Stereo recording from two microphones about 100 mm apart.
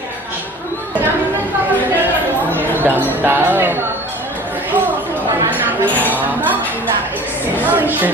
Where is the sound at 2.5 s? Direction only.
20° right (ahead or behind).